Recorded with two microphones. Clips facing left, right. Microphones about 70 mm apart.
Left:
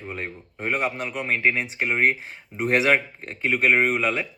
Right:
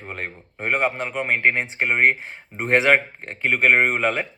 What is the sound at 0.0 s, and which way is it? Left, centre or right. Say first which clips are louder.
Speech: right 1 dB; right.